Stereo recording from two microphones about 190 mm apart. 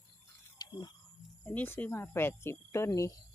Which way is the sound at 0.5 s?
20° left (ahead or behind).